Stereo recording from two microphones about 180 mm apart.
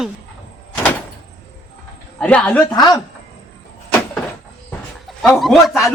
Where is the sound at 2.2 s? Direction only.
5° left (ahead or behind).